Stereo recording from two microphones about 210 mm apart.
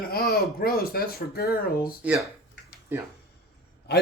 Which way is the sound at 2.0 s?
5° right (ahead or behind).